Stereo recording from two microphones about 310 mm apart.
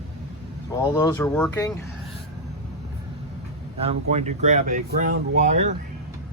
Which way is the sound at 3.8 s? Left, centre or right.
Right.